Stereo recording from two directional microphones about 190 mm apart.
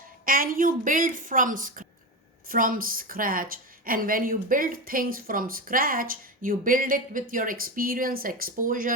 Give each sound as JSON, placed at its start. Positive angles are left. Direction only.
{"t": 0.3, "sound": "a woman's voice", "side_deg": -50}